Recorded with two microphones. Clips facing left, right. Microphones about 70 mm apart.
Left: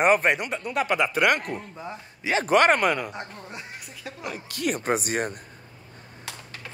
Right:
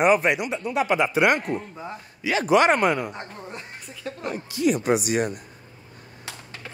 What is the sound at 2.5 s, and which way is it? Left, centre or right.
Speech, left.